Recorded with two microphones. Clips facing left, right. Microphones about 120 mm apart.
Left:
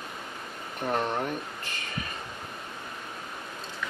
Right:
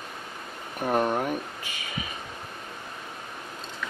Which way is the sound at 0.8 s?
10° right (ahead or behind).